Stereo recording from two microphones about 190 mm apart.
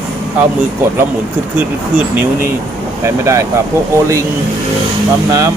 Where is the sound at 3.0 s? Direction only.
15° right (ahead or behind).